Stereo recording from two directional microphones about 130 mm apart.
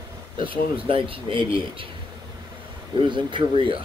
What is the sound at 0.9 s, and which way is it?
Speech, 45° right (ahead or behind).